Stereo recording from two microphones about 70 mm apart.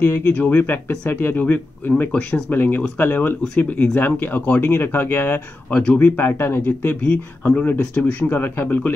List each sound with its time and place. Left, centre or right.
0.0 s speech: left
5.7 s speech: centre
7.0 s speech: centre